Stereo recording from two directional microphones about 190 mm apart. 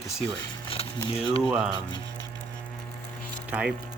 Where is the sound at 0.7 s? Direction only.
30° left (ahead or behind).